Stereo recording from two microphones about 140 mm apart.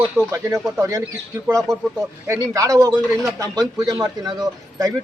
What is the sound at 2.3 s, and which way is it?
A man's voice, 25° right (ahead or behind).